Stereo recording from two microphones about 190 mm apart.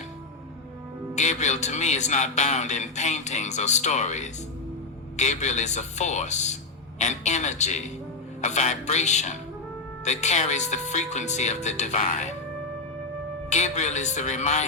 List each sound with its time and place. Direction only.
1.1 s a man's voice: 40° left (ahead or behind)
13.5 s a man's voice: 40° left (ahead or behind)